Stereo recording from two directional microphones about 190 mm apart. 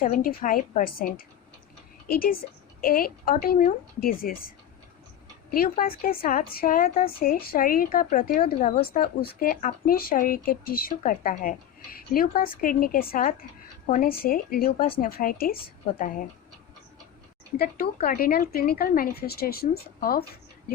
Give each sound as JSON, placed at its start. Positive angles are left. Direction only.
{"t": 0.0, "sound": "speech", "side_deg": 45}
{"t": 2.0, "sound": "speech", "side_deg": 50}
{"t": 5.5, "sound": "speech", "side_deg": 50}
{"t": 17.6, "sound": "speech", "side_deg": 50}